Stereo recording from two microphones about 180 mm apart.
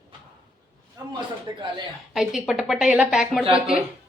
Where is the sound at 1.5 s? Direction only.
25° right (ahead or behind).